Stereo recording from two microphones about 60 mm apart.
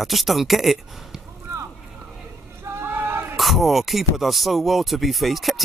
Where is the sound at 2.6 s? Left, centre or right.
Right.